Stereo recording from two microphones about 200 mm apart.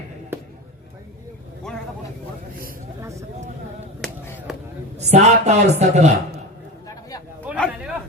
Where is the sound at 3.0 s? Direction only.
15° right (ahead or behind).